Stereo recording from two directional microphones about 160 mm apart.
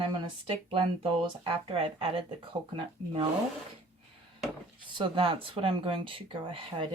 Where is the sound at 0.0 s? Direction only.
35° right (ahead or behind).